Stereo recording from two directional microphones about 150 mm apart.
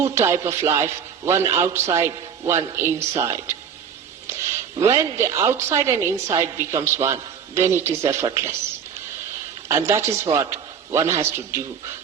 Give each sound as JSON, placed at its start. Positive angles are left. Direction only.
{"t": 0.0, "sound": "a woman's voice", "side_deg": -20}
{"t": 4.8, "sound": "a woman's voice", "side_deg": -20}
{"t": 9.6, "sound": "a man's voice", "side_deg": -20}